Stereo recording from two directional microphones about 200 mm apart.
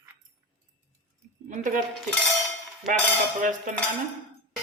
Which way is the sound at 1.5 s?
40° right (ahead or behind).